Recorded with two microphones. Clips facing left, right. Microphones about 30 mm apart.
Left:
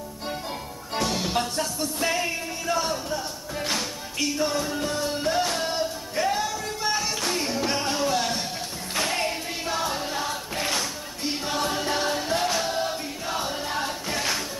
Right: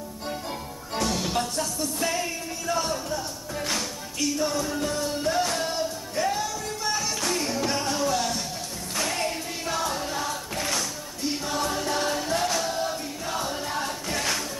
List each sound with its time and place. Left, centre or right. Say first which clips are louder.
0.3 s music: left 1 dB; centre